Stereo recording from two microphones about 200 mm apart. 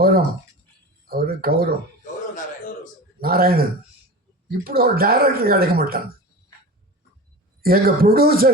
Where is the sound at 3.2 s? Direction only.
50° right (ahead or behind).